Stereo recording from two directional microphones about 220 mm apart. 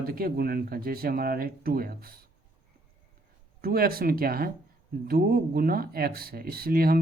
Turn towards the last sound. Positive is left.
turn(degrees=-40)  # may be behind; listen again after turning